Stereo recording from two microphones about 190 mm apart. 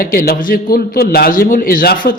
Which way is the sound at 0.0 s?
50° left (ahead or behind).